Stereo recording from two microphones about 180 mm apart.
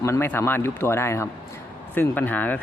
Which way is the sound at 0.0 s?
15° left (ahead or behind).